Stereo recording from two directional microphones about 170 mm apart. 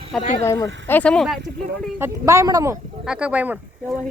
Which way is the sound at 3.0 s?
5° right (ahead or behind).